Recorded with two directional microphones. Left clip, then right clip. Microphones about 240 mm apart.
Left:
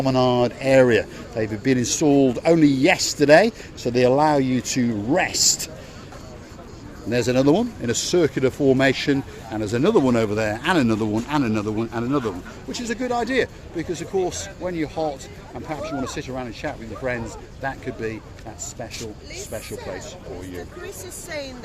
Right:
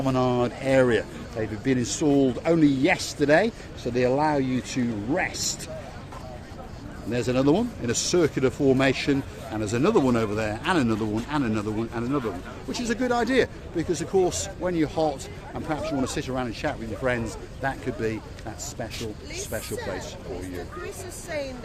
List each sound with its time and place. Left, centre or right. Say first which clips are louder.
0.0 s speech: left 5 dB; left
7.1 s speech: left 4 dB; left
12.7 s speech: left 1 dB; centre
19.4 s speech: even; centre
20.8 s speech: left 1 dB; centre